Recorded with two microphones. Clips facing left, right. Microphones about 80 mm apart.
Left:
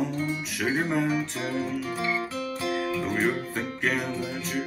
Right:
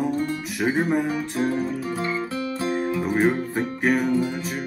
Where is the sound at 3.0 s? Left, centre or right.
Centre.